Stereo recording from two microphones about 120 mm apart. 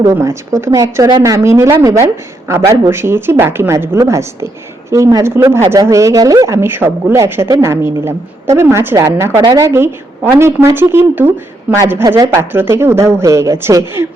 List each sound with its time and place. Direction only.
0.0 s a woman's voice: 25° right (ahead or behind)